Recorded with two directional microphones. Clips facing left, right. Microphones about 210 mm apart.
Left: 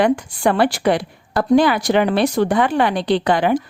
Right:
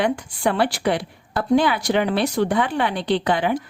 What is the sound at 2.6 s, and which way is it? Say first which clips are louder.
Speech: left 5 dB; 90° left.